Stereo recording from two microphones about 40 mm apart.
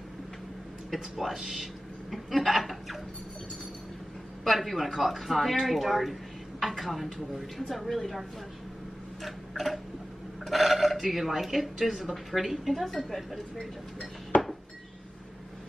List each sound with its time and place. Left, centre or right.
0.8 s a man's voice: centre
4.5 s speech: centre
9.2 s tick-tock: centre
10.4 s speech: centre
14.3 s dishes: left